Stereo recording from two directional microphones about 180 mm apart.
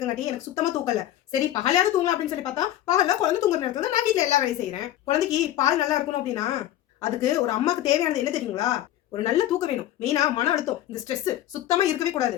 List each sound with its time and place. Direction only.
0.5 s speech: 20° left (ahead or behind)